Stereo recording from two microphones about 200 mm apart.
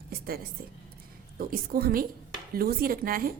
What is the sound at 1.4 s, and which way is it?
A woman's voice, 45° right (ahead or behind).